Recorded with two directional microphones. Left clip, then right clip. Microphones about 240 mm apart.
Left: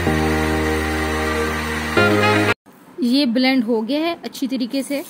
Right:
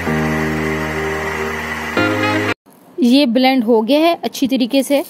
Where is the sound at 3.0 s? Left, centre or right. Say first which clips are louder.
Right 5 dB; right.